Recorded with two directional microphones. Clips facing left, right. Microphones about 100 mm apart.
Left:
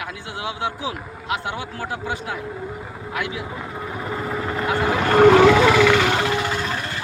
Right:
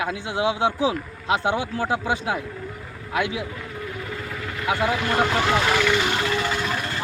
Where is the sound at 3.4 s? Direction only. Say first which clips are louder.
Left 3 dB; 30° left (ahead or behind).